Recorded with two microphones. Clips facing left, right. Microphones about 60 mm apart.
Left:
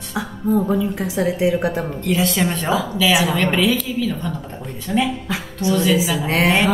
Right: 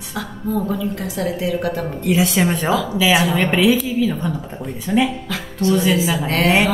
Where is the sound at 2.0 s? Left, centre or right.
Centre.